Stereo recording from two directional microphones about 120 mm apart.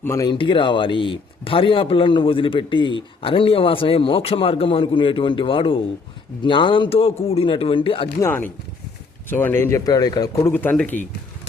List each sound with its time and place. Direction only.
0.0 s speech: 25° left (ahead or behind)
0.3 s speech: 45° left (ahead or behind)
8.2 s speech: 15° left (ahead or behind); by 10.2 s 35° left (ahead or behind)
10.4 s speech: 15° left (ahead or behind)